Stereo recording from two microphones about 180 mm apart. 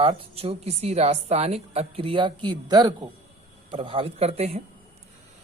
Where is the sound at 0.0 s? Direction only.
30° right (ahead or behind).